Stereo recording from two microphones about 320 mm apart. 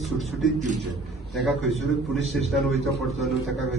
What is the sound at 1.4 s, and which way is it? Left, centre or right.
Speech, centre.